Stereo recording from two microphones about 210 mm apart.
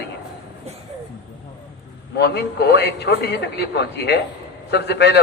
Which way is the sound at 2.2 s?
55° left (ahead or behind).